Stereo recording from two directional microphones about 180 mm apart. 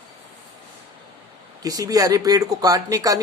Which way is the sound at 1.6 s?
20° right (ahead or behind).